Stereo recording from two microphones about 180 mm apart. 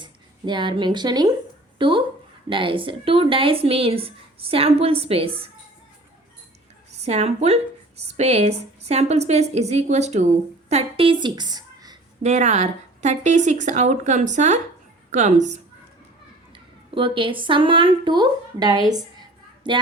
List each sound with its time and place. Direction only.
0.0 s speech: 25° right (ahead or behind)
7.0 s a woman's voice: 35° right (ahead or behind)
12.2 s speech: 40° right (ahead or behind)
16.5 s a woman's voice: 30° right (ahead or behind)
18.9 s a sound: 20° right (ahead or behind)